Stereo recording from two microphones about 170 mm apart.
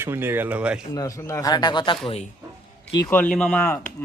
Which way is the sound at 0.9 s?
20° left (ahead or behind).